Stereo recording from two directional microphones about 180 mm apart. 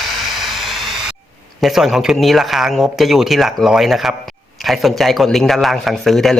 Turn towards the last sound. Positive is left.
turn(degrees=0)  # may be behind; listen again after turning